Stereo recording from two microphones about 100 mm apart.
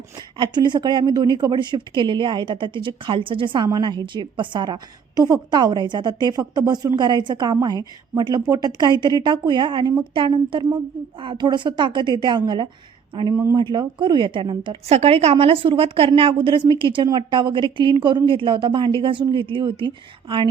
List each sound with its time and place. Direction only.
0.2 s speech: 50° right (ahead or behind)
13.3 s speech: 30° right (ahead or behind)
13.6 s speech: 50° right (ahead or behind)
14.8 s a woman's voice: 90° right; by 20.5 s 55° right (ahead or behind)